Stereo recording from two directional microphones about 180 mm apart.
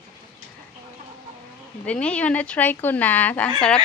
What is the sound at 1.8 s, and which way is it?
Speech, 5° left (ahead or behind).